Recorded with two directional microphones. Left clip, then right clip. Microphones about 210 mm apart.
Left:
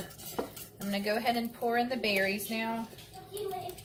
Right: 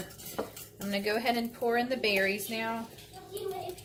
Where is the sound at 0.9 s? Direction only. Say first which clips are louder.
Right 1 dB; 45° right (ahead or behind).